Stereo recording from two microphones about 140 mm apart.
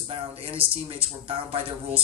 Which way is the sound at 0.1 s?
45° right (ahead or behind).